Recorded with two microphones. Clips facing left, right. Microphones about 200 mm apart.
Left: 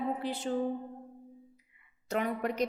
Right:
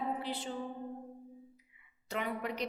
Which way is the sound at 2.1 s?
45° left (ahead or behind).